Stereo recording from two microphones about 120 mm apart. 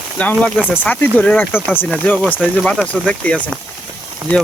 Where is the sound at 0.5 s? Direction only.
10° right (ahead or behind).